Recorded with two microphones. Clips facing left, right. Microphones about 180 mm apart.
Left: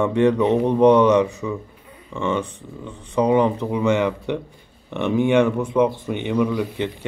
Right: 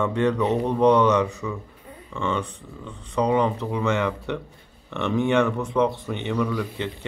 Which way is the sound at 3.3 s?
15° left (ahead or behind).